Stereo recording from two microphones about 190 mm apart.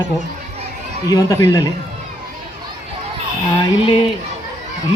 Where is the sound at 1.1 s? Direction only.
20° left (ahead or behind).